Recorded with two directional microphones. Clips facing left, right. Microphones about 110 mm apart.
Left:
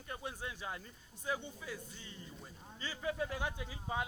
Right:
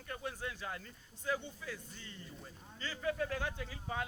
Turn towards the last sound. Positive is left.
turn(degrees=20)  # may be behind; listen again after turning